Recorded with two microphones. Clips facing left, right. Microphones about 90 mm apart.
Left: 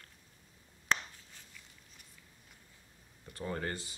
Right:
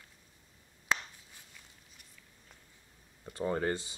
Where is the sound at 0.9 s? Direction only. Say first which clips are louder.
Even; 15° right (ahead or behind).